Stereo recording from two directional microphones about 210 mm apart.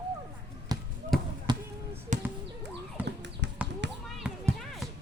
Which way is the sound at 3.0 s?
55° right (ahead or behind).